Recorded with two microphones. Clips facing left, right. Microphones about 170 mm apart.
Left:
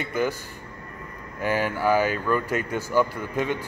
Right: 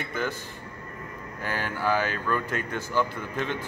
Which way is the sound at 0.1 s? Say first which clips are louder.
Left 6 dB; 10° left (ahead or behind).